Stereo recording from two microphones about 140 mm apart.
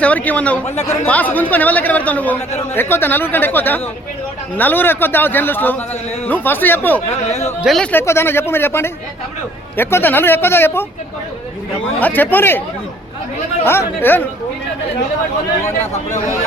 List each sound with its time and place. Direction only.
0.0 s a man's voice: 10° left (ahead or behind)
7.6 s a man's voice: 5° left (ahead or behind)
11.9 s a man's voice: 10° left (ahead or behind)
13.7 s a man's voice: 15° left (ahead or behind)
15.6 s speech: 55° left (ahead or behind)